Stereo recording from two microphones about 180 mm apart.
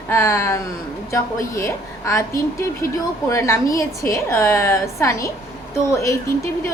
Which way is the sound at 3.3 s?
15° left (ahead or behind).